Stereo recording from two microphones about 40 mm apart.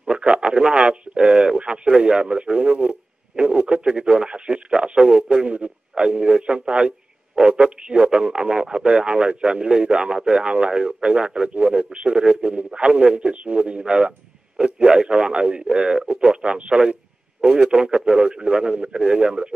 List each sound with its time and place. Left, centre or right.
0.1 s speech: right